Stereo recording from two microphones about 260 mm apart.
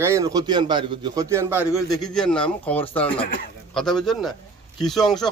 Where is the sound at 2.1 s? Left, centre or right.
Centre.